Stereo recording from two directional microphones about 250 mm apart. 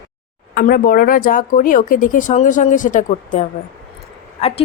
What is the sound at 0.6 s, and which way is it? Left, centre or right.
Speech, left.